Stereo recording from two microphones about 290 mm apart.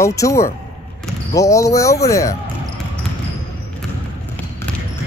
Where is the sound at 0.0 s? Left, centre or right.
Centre.